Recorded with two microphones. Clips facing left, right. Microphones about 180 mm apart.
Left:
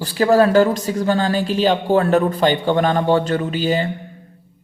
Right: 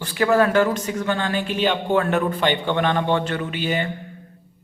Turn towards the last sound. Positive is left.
turn(degrees=35)  # may be behind; listen again after turning